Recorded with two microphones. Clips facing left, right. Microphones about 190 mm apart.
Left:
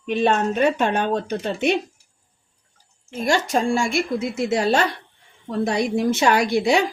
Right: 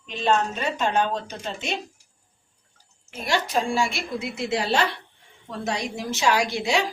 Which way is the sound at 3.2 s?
50° left (ahead or behind).